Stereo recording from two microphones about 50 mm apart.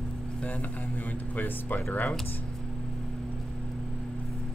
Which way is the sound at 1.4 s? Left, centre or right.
Left.